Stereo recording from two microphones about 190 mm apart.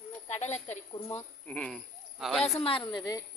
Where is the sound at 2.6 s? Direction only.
30° left (ahead or behind).